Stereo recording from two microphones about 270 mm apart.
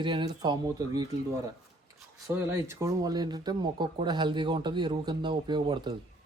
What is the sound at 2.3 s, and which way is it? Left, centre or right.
Speech, centre.